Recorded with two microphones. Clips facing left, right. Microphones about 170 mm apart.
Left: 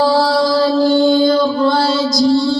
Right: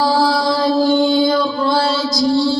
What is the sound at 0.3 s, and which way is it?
Music, 20° right (ahead or behind).